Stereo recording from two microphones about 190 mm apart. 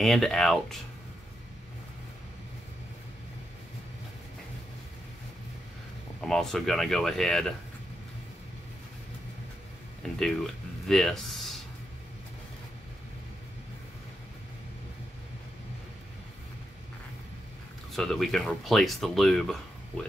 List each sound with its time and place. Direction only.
0.0 s speech: centre (ahead or behind)
6.2 s speech: centre (ahead or behind)
10.0 s speech: centre (ahead or behind)
17.9 s speech: centre (ahead or behind)